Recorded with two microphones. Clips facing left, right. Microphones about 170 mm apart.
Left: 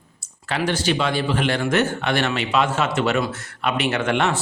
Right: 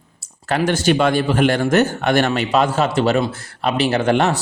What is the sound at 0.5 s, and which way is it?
A man's voice, 45° right (ahead or behind).